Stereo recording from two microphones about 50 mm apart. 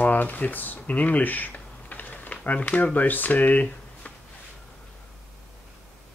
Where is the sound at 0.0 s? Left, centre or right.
Left.